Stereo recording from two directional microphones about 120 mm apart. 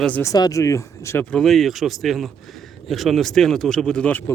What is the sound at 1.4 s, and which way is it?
Speech, centre (ahead or behind).